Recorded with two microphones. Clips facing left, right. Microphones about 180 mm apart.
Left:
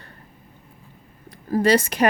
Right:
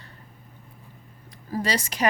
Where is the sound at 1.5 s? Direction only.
55° left (ahead or behind).